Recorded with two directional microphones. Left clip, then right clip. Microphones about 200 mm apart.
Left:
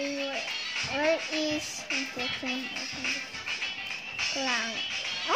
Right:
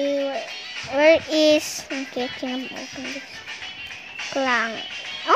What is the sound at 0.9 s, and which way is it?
Speech, 40° right (ahead or behind).